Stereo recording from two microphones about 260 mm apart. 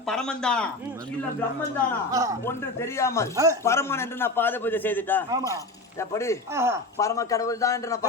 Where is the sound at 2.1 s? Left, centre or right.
Centre.